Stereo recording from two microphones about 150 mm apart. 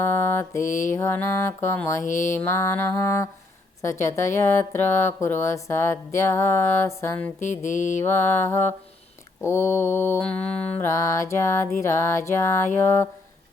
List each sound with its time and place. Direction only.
0.0 s mantra: 15° left (ahead or behind)
0.6 s mantra: 55° left (ahead or behind)
0.9 s mantra: 15° left (ahead or behind)
2.0 s mantra: 55° left (ahead or behind)
2.4 s mantra: 20° left (ahead or behind)
7.3 s mantra: 55° left (ahead or behind)
8.0 s mantra: 15° left (ahead or behind)